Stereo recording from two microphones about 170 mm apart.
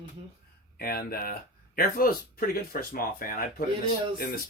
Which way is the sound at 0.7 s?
65° left (ahead or behind).